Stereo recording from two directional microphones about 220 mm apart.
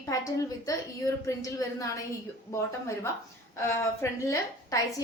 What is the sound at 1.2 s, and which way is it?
Speech, 15° left (ahead or behind).